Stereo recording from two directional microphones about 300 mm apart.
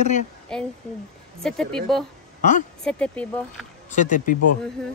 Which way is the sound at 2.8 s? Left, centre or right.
Centre.